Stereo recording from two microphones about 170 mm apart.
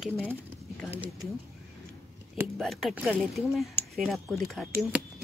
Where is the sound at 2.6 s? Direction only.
Centre (ahead or behind).